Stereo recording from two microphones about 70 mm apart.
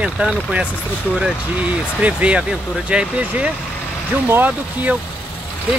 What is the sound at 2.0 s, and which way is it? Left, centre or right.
Speech, centre.